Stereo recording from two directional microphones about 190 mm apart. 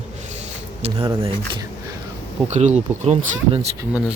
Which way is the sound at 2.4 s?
35° right (ahead or behind).